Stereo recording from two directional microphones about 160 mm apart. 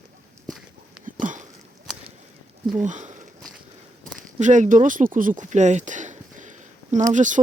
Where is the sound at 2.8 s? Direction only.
50° right (ahead or behind).